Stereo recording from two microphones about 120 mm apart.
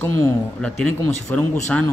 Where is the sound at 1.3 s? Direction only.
15° left (ahead or behind).